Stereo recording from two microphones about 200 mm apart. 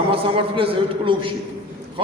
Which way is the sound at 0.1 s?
25° right (ahead or behind).